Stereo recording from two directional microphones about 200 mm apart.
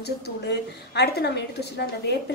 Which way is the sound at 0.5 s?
55° left (ahead or behind).